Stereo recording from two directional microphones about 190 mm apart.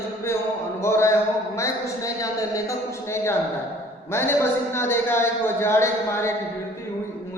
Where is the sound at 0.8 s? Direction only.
15° left (ahead or behind).